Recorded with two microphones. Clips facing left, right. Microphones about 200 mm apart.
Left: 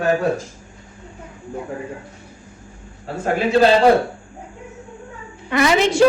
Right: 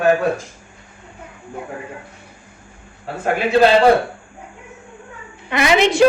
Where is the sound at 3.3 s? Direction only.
65° right (ahead or behind).